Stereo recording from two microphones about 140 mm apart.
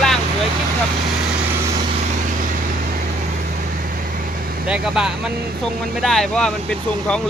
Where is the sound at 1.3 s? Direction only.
15° right (ahead or behind).